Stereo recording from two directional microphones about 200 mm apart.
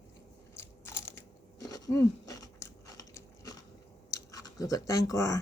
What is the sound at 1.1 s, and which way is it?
Biting, 15° left (ahead or behind).